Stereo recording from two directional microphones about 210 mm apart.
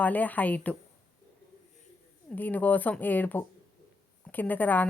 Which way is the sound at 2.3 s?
10° left (ahead or behind).